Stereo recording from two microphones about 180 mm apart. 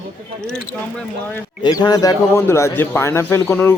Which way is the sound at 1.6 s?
20° left (ahead or behind).